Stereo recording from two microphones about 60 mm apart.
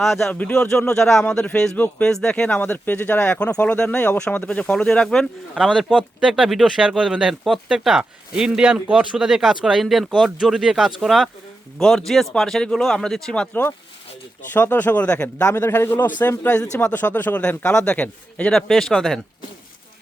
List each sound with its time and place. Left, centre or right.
0.0 s speech: centre
0.3 s speech: left
0.5 s speech: centre
1.7 s speech: left
2.0 s speech: centre
2.6 s speech: left
3.2 s speech: left
5.5 s speech: centre
13.5 s speech: left
15.4 s a man's voice: left
15.7 s speech: left
18.5 s speech: centre